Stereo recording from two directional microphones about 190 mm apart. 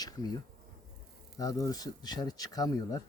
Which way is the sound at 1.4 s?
20° left (ahead or behind).